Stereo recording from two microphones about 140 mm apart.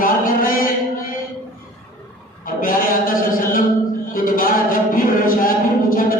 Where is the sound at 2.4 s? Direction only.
90° left.